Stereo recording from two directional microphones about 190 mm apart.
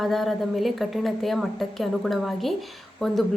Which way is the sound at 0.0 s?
Centre (ahead or behind).